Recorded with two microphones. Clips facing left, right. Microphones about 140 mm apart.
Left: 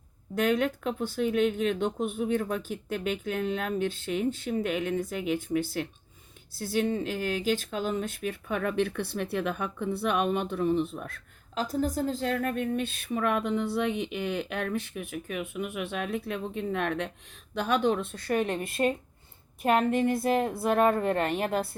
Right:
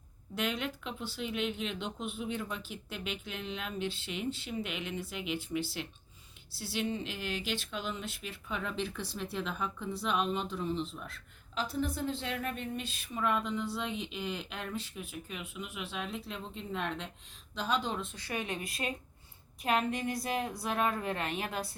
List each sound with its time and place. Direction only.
0.3 s speech: 45° left (ahead or behind)